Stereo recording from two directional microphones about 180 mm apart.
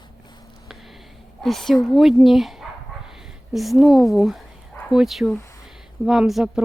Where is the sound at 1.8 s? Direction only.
Centre (ahead or behind).